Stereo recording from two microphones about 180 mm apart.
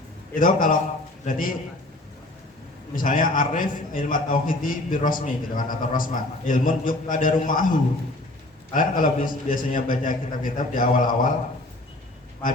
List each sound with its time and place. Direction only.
0.3 s a man's voice: 50° left (ahead or behind)
2.9 s a man's voice: 50° left (ahead or behind)